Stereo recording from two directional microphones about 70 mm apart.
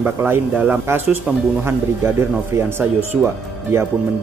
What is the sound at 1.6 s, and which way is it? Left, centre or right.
A man's voice, right.